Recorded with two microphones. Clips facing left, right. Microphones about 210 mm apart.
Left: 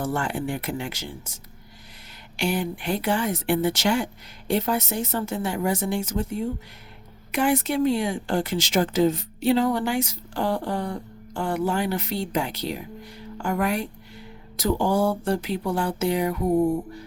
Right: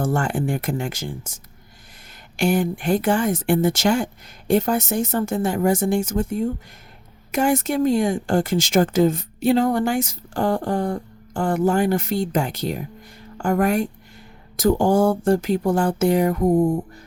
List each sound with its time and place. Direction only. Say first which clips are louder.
0.0 s speech: right 4 dB; 50° right (ahead or behind)